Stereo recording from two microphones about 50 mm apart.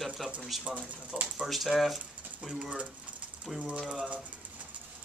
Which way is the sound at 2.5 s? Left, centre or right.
Right.